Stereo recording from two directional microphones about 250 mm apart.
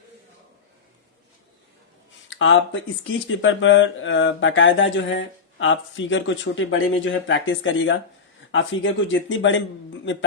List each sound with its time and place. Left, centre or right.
2.3 s speech: left